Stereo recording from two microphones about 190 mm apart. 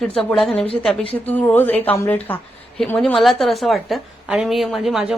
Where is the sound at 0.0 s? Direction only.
5° left (ahead or behind).